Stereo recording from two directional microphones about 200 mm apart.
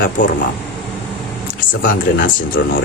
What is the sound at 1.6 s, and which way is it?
Speech, 45° left (ahead or behind).